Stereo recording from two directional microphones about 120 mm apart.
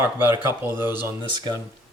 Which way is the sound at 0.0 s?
20° right (ahead or behind).